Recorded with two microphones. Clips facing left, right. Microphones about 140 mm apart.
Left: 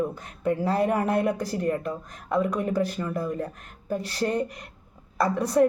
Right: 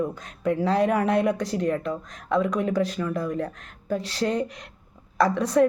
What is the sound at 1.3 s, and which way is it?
Speech, 75° right (ahead or behind).